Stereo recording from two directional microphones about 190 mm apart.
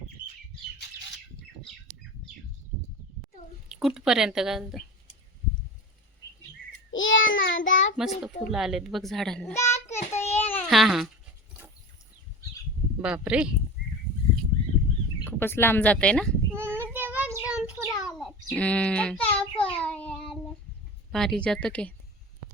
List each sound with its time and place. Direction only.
3.7 s speech: centre (ahead or behind)
6.9 s child singing: 90° left
7.7 s a child's voice: 80° left
8.4 s speech: centre (ahead or behind)
9.5 s child singing: 15° left (ahead or behind)
10.7 s speech: centre (ahead or behind)
13.0 s speech: 5° right (ahead or behind)
15.2 s speech: 10° left (ahead or behind)
16.5 s child singing: 10° right (ahead or behind)
18.4 s a child's voice: 5° left (ahead or behind)
19.8 s child singing: 5° left (ahead or behind)
21.1 s speech: centre (ahead or behind)